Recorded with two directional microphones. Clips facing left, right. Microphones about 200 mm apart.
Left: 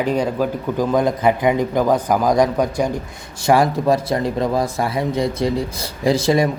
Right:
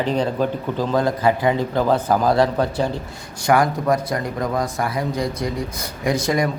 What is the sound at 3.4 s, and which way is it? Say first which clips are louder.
Speech: left 2 dB; 25° left (ahead or behind).